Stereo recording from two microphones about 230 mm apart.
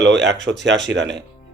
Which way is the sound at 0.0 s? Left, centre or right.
Right.